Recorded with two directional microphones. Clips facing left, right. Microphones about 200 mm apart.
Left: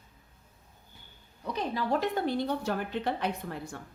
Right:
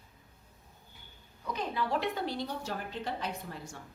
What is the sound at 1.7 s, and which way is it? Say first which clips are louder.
Speech: left 4 dB; 45° left (ahead or behind).